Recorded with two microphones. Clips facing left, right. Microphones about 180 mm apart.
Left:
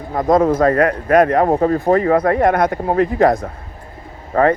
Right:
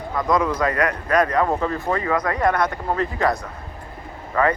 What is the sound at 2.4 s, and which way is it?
Speech, 50° left (ahead or behind).